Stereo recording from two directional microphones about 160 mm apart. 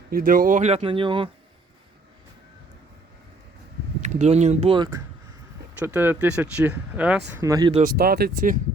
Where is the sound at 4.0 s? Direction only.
45° right (ahead or behind); by 5.0 s 30° right (ahead or behind).